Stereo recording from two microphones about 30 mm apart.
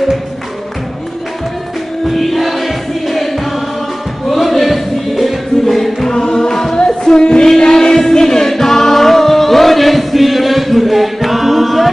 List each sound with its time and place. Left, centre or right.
2.1 s music: centre
6.2 s music: left
6.5 s music: centre
6.9 s music: left
7.6 s choir: left; by 11.9 s centre